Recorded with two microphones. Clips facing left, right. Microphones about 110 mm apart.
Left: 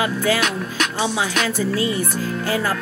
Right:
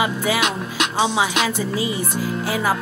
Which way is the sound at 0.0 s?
15° right (ahead or behind).